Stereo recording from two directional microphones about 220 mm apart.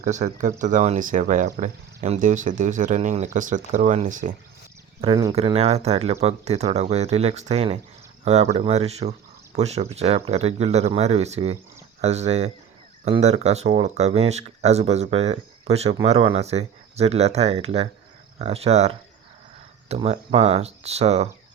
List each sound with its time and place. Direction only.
0.0 s speech: 35° right (ahead or behind)
4.9 s speech: 20° right (ahead or behind)